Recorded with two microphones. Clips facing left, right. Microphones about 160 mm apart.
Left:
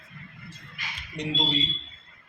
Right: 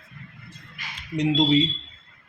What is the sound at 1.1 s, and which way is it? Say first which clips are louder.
Speech: right 10 dB; 90° right.